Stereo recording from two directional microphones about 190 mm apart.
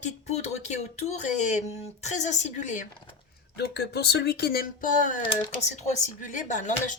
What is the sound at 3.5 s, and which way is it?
Speech, 60° left (ahead or behind).